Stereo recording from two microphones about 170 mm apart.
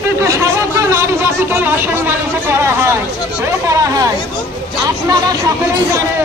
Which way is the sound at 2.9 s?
15° right (ahead or behind).